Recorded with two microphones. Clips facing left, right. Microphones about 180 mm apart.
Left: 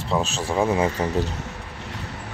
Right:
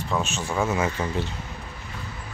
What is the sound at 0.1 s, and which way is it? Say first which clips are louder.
Speech: left 4 dB; 35° left (ahead or behind).